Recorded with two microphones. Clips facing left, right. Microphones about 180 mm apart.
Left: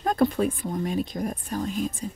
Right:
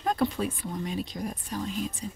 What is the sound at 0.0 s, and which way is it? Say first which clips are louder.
Speech: left 5 dB; 50° left (ahead or behind).